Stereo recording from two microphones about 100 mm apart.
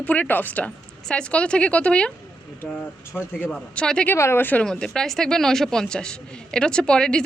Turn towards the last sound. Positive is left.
turn(degrees=5)  # may be behind; listen again after turning